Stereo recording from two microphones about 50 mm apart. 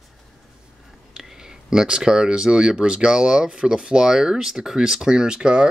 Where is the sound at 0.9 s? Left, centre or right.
Centre.